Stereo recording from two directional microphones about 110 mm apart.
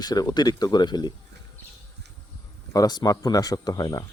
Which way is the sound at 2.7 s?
35° left (ahead or behind).